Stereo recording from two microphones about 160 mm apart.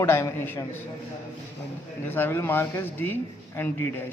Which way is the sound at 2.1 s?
15° left (ahead or behind).